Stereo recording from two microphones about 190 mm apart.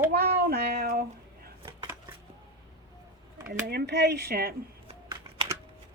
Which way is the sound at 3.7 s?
60° right (ahead or behind).